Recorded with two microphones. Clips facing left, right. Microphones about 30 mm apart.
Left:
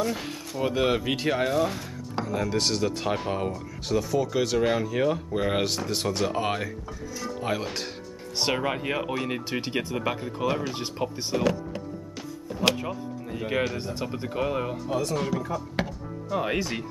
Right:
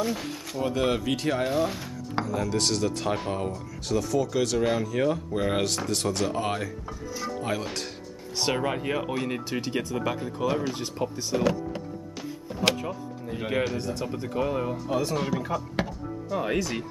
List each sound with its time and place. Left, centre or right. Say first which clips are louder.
0.6 s speech: left 1 dB; centre
1.6 s speech: left 1 dB; centre
2.2 s speech: left 1 dB; centre
6.9 s music: right 1 dB; centre
7.4 s speech: left 4 dB; centre
11.3 s power windows: even; centre
12.5 s music: left 1 dB; centre
13.5 s speech: even; centre
13.7 s speech: right 1 dB; left
14.9 s speech: even; centre
15.8 s music: left 1 dB; centre
16.3 s speech: even; centre